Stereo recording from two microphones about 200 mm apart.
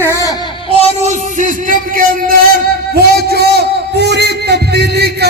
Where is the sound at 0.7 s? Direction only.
35° right (ahead or behind).